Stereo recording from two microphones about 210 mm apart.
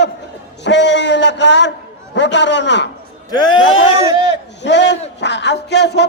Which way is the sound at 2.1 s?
60° left (ahead or behind).